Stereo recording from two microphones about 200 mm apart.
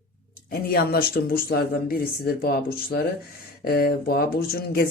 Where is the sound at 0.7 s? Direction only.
50° left (ahead or behind).